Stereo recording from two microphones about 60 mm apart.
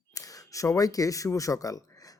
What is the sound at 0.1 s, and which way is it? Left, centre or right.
Speech, left.